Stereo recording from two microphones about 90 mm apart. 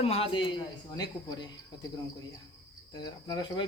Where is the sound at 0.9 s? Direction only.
50° left (ahead or behind).